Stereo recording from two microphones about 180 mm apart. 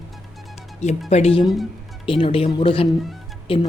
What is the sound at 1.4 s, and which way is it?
Speech, centre (ahead or behind).